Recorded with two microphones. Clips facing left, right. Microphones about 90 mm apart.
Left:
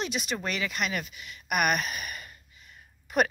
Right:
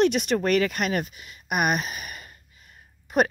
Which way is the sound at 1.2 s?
25° right (ahead or behind).